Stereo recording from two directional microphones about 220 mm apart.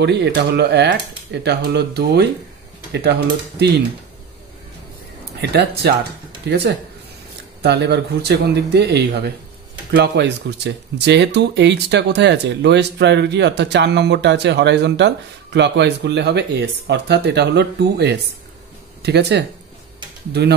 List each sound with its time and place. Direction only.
0.0 s speech: 50° right (ahead or behind)
5.4 s speech: 50° right (ahead or behind)
7.6 s speech: 50° right (ahead or behind)